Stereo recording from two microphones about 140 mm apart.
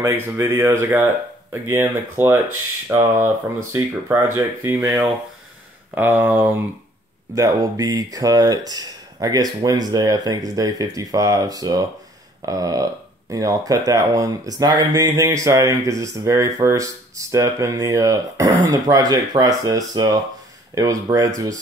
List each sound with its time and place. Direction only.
0.0 s speech: 15° right (ahead or behind)
7.3 s speech: 25° right (ahead or behind)